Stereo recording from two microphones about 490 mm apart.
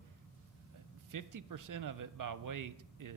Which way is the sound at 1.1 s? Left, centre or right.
Right.